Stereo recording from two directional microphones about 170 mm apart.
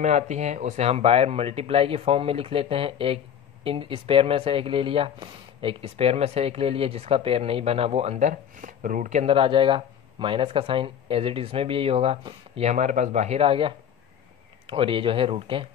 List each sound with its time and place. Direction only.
0.0 s speech: 40° right (ahead or behind)
9.2 s speech: 30° right (ahead or behind)